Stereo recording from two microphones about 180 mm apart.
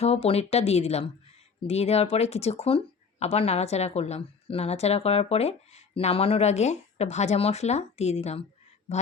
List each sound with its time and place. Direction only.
0.0 s speech: 35° left (ahead or behind)